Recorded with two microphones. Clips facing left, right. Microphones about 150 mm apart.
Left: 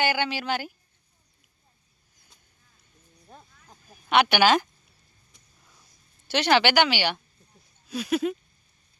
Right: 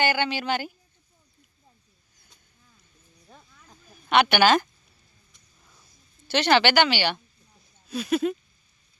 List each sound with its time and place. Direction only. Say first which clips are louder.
0.0 s a woman's voice: right 1 dB; 5° left (ahead or behind)
3.2 s a sound: left 2 dB; 20° left (ahead or behind)
4.1 s speech: right 1 dB; 10° left (ahead or behind)
6.2 s speech: right 1 dB; 10° left (ahead or behind)